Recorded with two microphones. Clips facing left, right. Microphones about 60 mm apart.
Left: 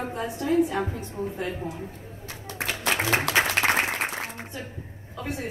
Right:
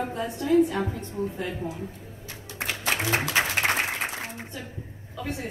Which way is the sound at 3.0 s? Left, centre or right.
Left.